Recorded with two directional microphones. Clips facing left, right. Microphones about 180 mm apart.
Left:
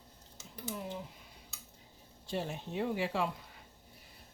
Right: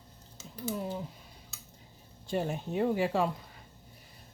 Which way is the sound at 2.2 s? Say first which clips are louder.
Right 5 dB; 50° right (ahead or behind).